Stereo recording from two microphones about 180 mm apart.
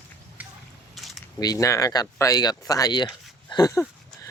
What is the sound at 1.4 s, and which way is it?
Speech, 20° left (ahead or behind).